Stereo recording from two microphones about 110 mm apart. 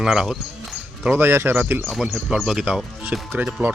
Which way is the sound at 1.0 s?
15° right (ahead or behind).